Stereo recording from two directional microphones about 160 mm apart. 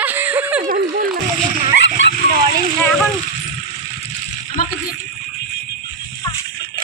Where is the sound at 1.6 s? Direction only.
90° left.